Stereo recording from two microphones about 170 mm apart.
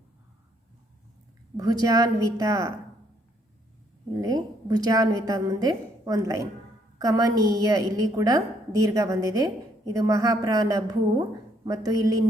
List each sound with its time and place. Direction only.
1.5 s a woman's voice: 25° right (ahead or behind)
4.2 s a woman's voice: 20° right (ahead or behind)